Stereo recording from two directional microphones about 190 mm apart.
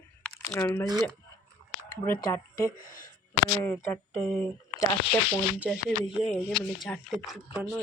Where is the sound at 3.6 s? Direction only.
10° left (ahead or behind).